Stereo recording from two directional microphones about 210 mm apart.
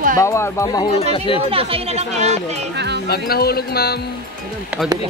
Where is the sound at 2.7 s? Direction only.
55° right (ahead or behind).